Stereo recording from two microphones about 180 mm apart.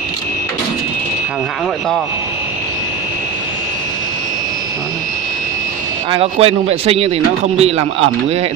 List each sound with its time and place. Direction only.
6.1 s speech: 35° right (ahead or behind)